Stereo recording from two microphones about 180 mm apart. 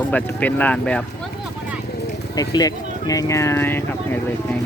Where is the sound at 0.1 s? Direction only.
10° left (ahead or behind).